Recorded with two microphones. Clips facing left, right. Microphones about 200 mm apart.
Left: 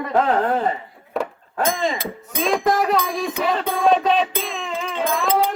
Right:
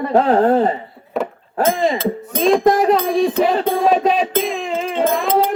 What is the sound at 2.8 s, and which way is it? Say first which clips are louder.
Speech: right 6 dB; 30° right (ahead or behind).